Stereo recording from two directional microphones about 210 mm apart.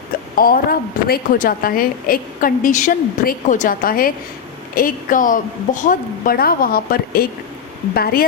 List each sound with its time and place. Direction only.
0.3 s a woman's voice: 45° left (ahead or behind)